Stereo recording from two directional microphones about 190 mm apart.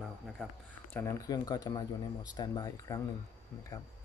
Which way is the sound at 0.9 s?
15° left (ahead or behind).